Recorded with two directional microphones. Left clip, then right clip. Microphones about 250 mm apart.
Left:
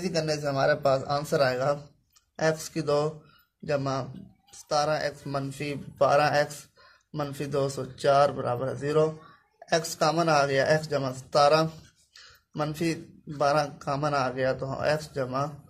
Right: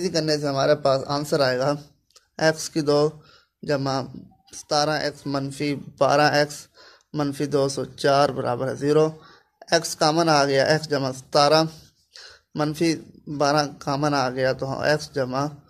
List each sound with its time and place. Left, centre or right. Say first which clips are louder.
0.0 s speech: right 5 dB; right